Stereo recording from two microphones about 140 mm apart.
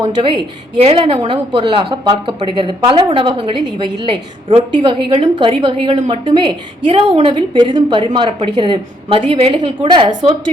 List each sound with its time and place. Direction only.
0.0 s a woman's voice: 35° right (ahead or behind)